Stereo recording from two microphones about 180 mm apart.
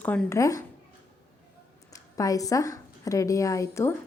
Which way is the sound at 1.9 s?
20° left (ahead or behind).